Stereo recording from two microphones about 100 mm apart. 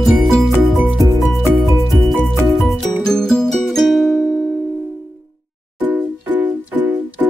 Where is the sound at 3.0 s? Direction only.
5° left (ahead or behind).